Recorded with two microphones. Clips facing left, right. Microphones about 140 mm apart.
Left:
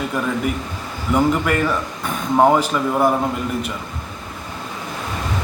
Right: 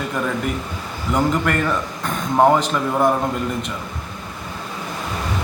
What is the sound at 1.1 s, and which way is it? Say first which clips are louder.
A man's voice: left 2 dB; 5° left (ahead or behind).